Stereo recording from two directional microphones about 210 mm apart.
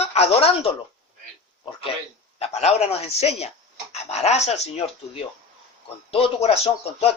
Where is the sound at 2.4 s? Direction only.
30° left (ahead or behind).